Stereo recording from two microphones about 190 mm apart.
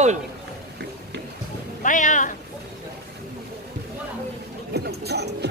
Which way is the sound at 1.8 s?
40° left (ahead or behind).